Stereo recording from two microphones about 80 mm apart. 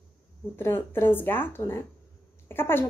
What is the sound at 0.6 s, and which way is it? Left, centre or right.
A woman's voice, left.